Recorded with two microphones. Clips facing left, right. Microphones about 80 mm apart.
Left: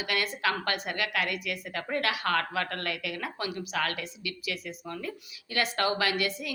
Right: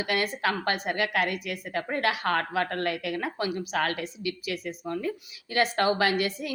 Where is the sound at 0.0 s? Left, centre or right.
Right.